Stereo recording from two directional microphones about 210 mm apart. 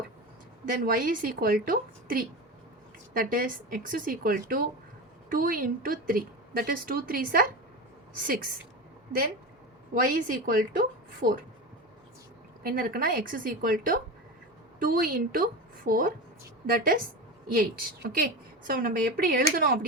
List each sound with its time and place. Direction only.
0.7 s a woman's voice: 40° right (ahead or behind)
9.9 s a woman's voice: 40° right (ahead or behind)
12.6 s a woman's voice: 45° right (ahead or behind)